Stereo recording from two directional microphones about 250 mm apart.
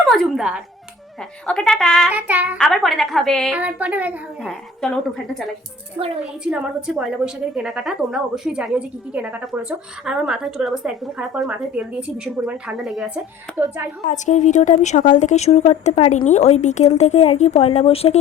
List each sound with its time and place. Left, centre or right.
0.0 s a woman's voice: centre
6.4 s a woman's voice: centre
14.0 s a woman's voice: left